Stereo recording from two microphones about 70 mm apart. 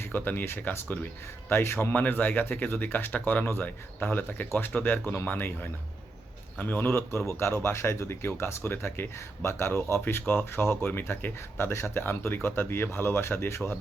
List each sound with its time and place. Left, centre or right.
0.1 s speech: left
1.9 s speech: left
6.6 s speech: left
6.8 s speech: left